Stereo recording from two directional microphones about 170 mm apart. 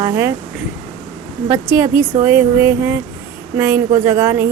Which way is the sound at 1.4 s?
15° right (ahead or behind).